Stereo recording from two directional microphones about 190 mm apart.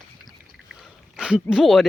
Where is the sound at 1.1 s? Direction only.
5° right (ahead or behind).